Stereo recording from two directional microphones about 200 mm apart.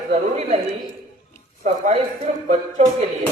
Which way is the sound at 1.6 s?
35° right (ahead or behind).